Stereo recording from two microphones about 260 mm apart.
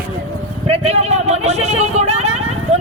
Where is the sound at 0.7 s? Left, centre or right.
Right.